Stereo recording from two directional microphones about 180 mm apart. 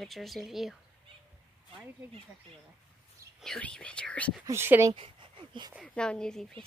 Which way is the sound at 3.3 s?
5° left (ahead or behind).